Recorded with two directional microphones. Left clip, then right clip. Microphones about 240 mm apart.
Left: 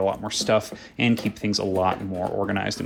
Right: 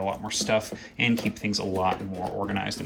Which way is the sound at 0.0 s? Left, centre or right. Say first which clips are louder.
Left 5 dB; centre.